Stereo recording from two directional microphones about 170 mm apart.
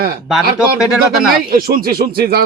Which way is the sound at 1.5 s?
60° right (ahead or behind).